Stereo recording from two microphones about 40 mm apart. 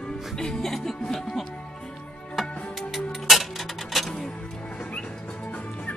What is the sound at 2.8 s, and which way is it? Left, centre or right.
Music, centre.